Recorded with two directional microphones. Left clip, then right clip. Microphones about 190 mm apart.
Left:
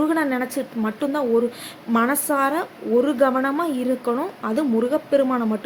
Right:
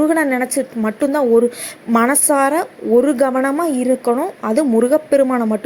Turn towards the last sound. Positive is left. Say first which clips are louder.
# right 5 dB
turn(degrees=-30)  # may be behind; listen again after turning